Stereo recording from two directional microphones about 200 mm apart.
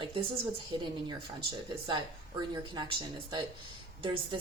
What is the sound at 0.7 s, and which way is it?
Speech, 25° right (ahead or behind).